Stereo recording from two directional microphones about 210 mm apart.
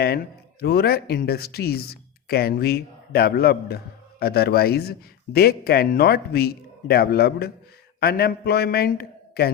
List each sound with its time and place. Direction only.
0.6 s a man's voice: 50° left (ahead or behind)